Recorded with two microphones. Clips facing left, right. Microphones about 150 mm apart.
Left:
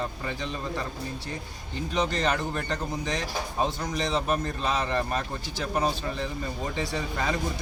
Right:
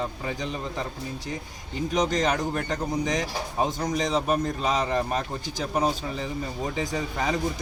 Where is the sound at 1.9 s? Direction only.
15° right (ahead or behind).